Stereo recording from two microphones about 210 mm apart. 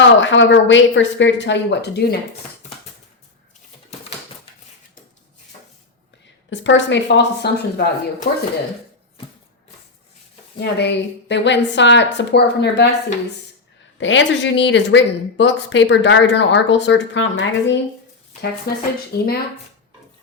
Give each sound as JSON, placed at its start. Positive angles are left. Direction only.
{"t": 0.0, "sound": "speech", "side_deg": 60}
{"t": 6.5, "sound": "speech", "side_deg": 60}
{"t": 10.6, "sound": "speech", "side_deg": 55}
{"t": 14.0, "sound": "speech", "side_deg": 60}
{"t": 18.7, "sound": "speech", "side_deg": 45}